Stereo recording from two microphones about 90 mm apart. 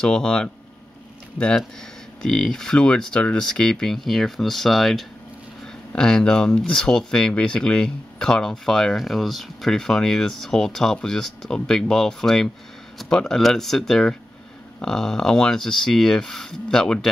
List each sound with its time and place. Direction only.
0.0 s speech: 10° left (ahead or behind)
2.2 s speech: 5° left (ahead or behind)